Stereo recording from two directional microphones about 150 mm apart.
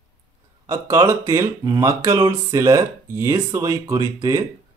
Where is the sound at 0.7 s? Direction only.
20° right (ahead or behind).